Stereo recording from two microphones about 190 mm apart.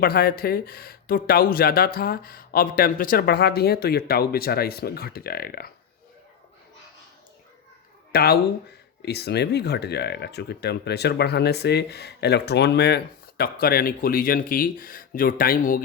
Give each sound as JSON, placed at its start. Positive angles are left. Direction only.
{"t": 0.0, "sound": "speech", "side_deg": 50}
{"t": 8.1, "sound": "speech", "side_deg": 55}